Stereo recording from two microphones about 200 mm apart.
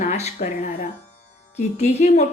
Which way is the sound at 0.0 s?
35° left (ahead or behind).